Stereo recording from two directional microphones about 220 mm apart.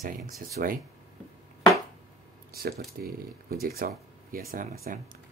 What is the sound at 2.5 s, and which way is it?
Speech, 45° right (ahead or behind).